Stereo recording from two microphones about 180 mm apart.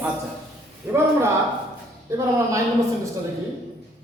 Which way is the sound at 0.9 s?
10° right (ahead or behind).